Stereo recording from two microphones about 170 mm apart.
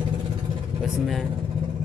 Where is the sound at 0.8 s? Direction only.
Centre (ahead or behind).